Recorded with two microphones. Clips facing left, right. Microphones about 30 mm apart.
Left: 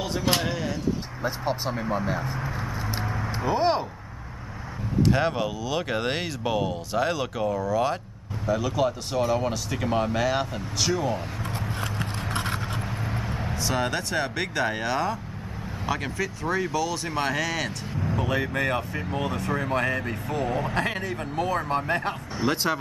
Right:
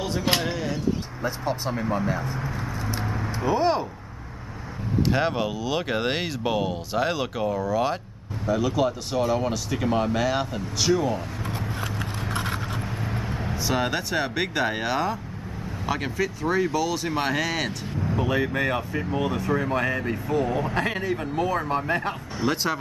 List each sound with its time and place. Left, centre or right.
0.4 s speech: centre
1.2 s speech: centre
3.0 s vehicle: centre
3.4 s speech: centre
5.0 s speech: centre